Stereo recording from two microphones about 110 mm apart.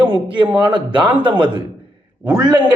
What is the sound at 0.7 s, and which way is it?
Speech, 45° right (ahead or behind).